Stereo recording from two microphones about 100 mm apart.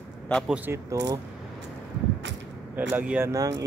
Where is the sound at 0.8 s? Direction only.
35° right (ahead or behind).